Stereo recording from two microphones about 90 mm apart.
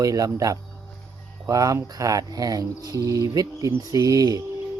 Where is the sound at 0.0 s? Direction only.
40° right (ahead or behind).